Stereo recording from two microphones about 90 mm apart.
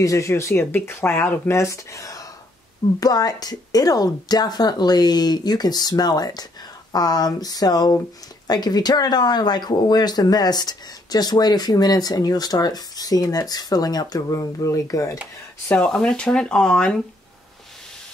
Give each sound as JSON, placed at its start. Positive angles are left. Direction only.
{"t": 0.0, "sound": "speech", "side_deg": 35}
{"t": 1.5, "sound": "speech", "side_deg": 35}
{"t": 15.9, "sound": "speech", "side_deg": 10}